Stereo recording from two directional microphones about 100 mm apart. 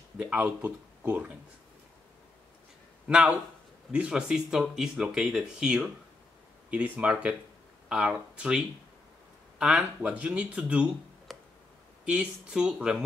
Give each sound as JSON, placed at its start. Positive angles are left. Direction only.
{"t": 0.2, "sound": "speech", "side_deg": -15}
{"t": 3.1, "sound": "speech", "side_deg": -10}
{"t": 11.3, "sound": "tick", "side_deg": 0}
{"t": 12.0, "sound": "speech", "side_deg": -10}